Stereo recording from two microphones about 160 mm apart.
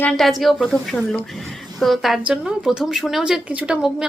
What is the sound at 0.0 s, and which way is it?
A woman's voice, centre (ahead or behind).